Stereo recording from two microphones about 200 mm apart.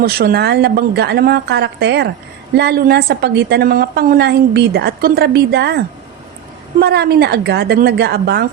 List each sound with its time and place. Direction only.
0.0 s a woman's voice: 50° right (ahead or behind)